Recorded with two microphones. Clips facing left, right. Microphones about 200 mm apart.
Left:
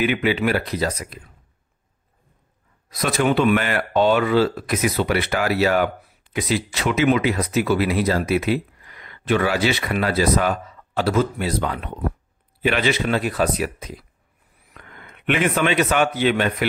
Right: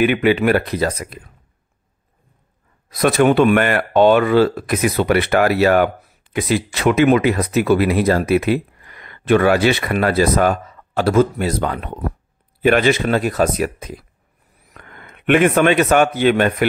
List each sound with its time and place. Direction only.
0.0 s speech: 55° right (ahead or behind)
2.9 s a man's voice: 55° right (ahead or behind)